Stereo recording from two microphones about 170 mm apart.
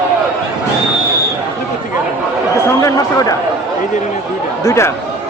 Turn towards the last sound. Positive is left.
turn(degrees=15)  # may be behind; listen again after turning